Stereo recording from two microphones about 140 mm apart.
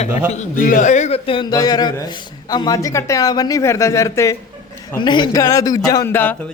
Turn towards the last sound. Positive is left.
turn(degrees=15)  # may be behind; listen again after turning